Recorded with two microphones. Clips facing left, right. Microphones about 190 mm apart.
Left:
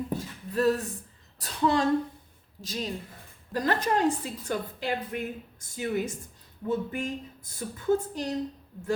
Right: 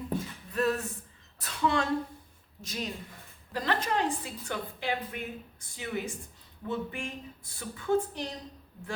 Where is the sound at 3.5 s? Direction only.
45° left (ahead or behind).